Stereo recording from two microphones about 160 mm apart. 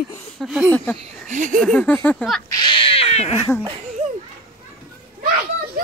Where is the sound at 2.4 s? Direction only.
25° left (ahead or behind).